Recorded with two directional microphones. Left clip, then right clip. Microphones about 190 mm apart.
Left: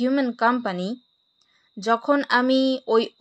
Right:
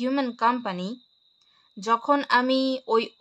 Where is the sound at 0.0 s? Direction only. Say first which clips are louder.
Left 3 dB; 10° left (ahead or behind).